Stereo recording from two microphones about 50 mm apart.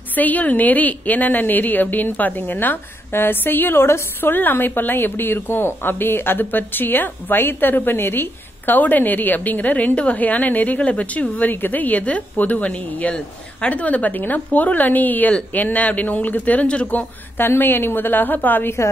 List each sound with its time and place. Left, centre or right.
0.1 s a woman's voice: left